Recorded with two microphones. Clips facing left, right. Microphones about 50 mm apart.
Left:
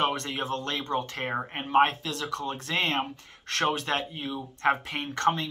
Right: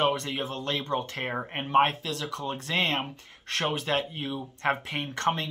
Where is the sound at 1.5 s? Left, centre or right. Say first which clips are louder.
Even; centre.